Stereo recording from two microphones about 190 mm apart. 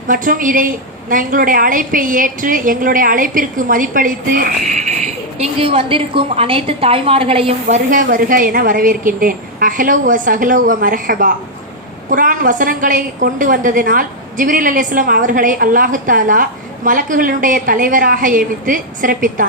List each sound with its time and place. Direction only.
0.1 s a woman's voice: 45° right (ahead or behind)
5.4 s a woman's voice: 30° right (ahead or behind)
7.9 s a woman's voice: 45° right (ahead or behind)